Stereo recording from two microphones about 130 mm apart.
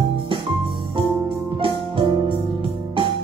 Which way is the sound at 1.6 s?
40° right (ahead or behind).